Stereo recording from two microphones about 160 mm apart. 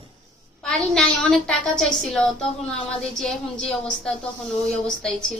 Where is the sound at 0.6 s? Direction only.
5° left (ahead or behind).